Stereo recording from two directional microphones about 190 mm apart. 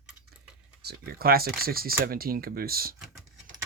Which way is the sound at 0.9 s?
55° right (ahead or behind).